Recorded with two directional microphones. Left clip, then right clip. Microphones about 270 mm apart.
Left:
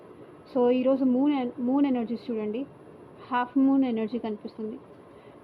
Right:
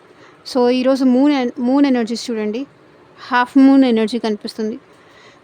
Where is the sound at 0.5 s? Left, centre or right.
Right.